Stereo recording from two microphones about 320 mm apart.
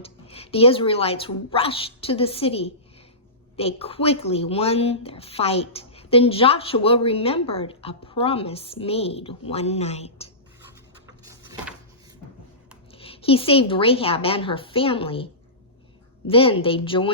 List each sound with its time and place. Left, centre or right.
0.0 s a woman's voice: centre
11.3 s a sound: centre
12.9 s a woman's voice: centre